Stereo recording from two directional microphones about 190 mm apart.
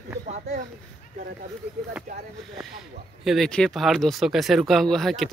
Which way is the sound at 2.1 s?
45° right (ahead or behind).